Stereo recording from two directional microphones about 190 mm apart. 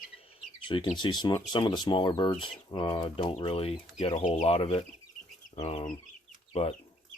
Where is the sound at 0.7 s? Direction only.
25° left (ahead or behind).